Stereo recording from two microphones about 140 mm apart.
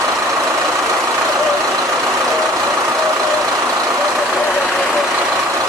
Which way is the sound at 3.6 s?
20° right (ahead or behind).